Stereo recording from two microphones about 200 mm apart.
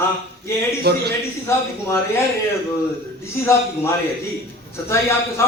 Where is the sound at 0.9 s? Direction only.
55° right (ahead or behind).